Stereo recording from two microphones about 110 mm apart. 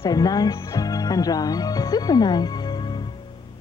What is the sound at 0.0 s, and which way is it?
Speech, 35° left (ahead or behind).